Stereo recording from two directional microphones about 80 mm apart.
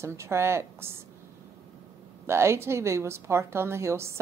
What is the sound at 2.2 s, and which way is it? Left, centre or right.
A woman's voice, right.